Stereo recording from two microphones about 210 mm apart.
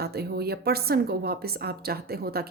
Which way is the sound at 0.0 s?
50° right (ahead or behind).